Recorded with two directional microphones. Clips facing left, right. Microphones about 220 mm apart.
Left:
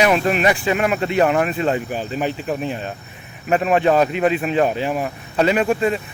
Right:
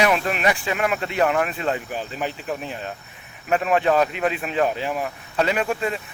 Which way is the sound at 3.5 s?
25° left (ahead or behind).